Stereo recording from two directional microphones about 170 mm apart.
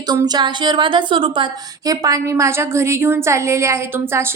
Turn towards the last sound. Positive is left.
turn(degrees=-15)  # may be behind; listen again after turning